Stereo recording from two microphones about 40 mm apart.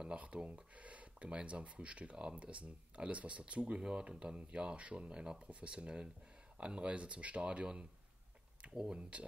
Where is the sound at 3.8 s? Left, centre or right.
Right.